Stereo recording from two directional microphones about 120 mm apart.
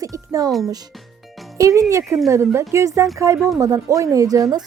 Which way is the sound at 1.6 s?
30° right (ahead or behind).